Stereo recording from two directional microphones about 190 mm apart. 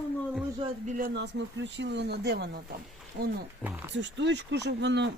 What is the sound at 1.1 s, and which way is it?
Speech, 65° right (ahead or behind).